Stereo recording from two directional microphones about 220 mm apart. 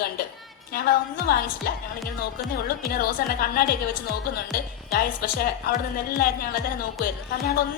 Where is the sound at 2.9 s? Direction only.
45° left (ahead or behind).